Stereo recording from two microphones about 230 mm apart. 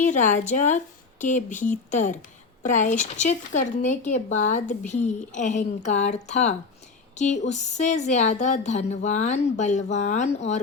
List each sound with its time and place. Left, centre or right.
0.0 s speech: left